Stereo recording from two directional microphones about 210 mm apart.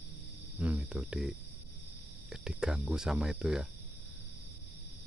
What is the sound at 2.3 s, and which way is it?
Speech, 5° right (ahead or behind).